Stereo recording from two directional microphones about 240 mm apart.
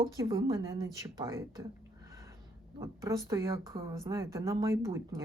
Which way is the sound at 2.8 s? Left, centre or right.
Centre.